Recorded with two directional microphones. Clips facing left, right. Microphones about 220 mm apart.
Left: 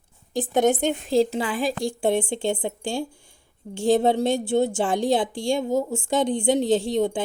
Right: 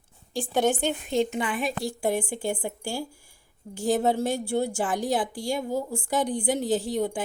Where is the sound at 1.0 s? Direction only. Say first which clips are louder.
Left 5 dB; 35° left (ahead or behind).